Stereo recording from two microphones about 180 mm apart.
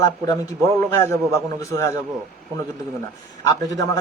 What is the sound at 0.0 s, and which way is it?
Speech, 20° left (ahead or behind).